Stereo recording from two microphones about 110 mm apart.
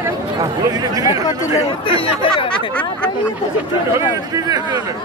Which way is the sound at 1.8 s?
55° left (ahead or behind).